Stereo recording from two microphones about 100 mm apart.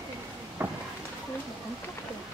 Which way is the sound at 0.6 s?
25° right (ahead or behind).